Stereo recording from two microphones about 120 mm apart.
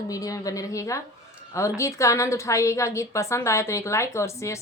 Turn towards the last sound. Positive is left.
turn(degrees=25)  # may be behind; listen again after turning